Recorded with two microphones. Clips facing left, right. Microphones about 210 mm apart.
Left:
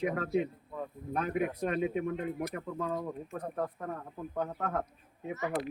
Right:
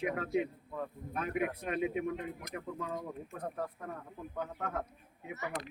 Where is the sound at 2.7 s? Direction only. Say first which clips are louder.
Left 5 dB; 50° left (ahead or behind).